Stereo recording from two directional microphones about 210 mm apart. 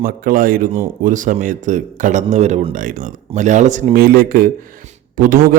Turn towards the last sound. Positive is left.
turn(degrees=-40)  # may be behind; listen again after turning